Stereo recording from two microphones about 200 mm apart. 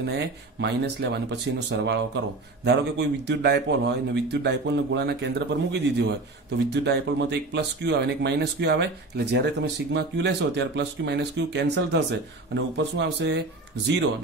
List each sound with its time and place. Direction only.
0.0 s speech: 60° right (ahead or behind)